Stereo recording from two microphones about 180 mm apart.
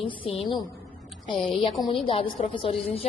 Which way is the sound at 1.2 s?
30° left (ahead or behind).